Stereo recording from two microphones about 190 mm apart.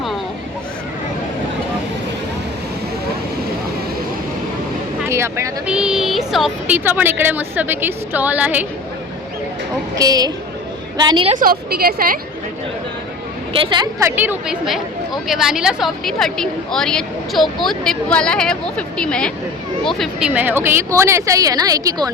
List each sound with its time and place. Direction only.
5.0 s speech: 15° right (ahead or behind)
9.9 s a woman's voice: 20° right (ahead or behind)
11.3 s a woman's voice: 50° right (ahead or behind)
13.5 s a woman's voice: 25° right (ahead or behind)
14.0 s a woman's voice: 10° right (ahead or behind)